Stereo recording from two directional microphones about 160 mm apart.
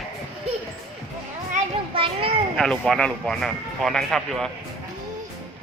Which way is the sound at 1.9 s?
35° right (ahead or behind).